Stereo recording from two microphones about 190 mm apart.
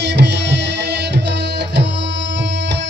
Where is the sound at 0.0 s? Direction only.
65° right (ahead or behind).